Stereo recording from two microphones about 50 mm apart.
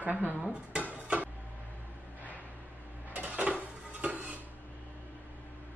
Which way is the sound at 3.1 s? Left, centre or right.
Right.